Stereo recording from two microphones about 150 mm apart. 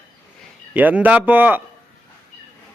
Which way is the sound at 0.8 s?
10° right (ahead or behind).